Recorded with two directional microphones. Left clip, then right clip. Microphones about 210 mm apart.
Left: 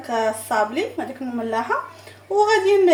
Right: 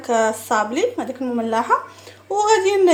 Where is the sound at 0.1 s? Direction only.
45° right (ahead or behind).